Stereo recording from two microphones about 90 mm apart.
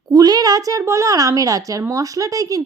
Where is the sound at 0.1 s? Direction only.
45° right (ahead or behind).